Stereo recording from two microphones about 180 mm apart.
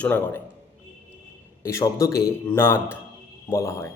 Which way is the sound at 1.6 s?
15° left (ahead or behind).